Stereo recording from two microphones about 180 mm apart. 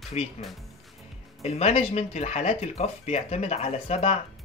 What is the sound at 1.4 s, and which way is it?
Speech, 35° left (ahead or behind).